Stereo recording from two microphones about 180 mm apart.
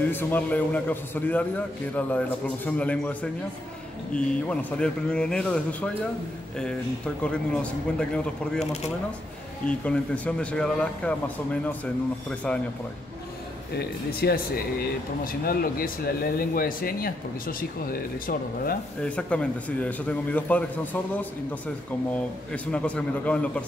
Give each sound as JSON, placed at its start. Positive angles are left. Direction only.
{"t": 0.1, "sound": "a man's voice", "side_deg": 10}
{"t": 7.2, "sound": "speech", "side_deg": 5}
{"t": 9.7, "sound": "a man's voice", "side_deg": 5}
{"t": 13.7, "sound": "speech", "side_deg": 60}
{"t": 15.4, "sound": "speech", "side_deg": 55}
{"t": 19.0, "sound": "a man's voice", "side_deg": 5}
{"t": 22.5, "sound": "speech", "side_deg": 5}